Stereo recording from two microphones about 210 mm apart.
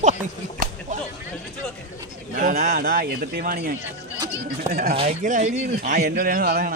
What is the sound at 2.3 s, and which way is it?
Speech, 40° right (ahead or behind).